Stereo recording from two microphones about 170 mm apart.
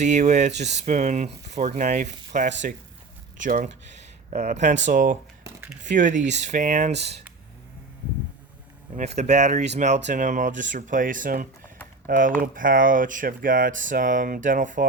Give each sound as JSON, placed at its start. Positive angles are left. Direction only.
{"t": 0.0, "sound": "speech", "side_deg": -40}
{"t": 5.4, "sound": "a sound", "side_deg": -10}
{"t": 5.8, "sound": "speech", "side_deg": -50}
{"t": 6.9, "sound": "speech", "side_deg": -80}
{"t": 9.0, "sound": "speech", "side_deg": -40}